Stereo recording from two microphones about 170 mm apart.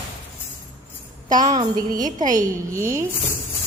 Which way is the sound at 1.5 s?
25° right (ahead or behind).